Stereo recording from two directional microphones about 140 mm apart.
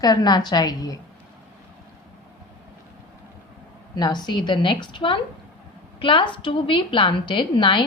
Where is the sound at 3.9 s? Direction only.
30° left (ahead or behind).